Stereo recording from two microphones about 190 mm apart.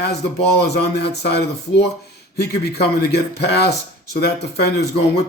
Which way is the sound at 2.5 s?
55° left (ahead or behind).